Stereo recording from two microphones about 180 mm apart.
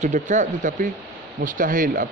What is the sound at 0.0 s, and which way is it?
Speech, 40° right (ahead or behind).